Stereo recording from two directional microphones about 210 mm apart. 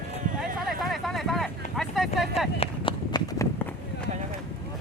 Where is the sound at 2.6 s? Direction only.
25° left (ahead or behind).